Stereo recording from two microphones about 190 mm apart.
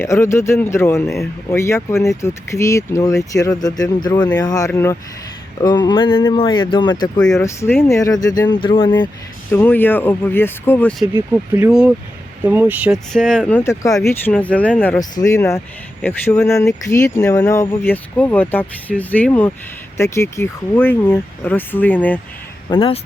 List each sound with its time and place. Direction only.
0.0 s speech: 15° left (ahead or behind)
9.5 s speech: 10° left (ahead or behind)
11.0 s speech: 10° right (ahead or behind)
13.1 s speech: 5° left (ahead or behind)
22.7 s speech: 30° left (ahead or behind)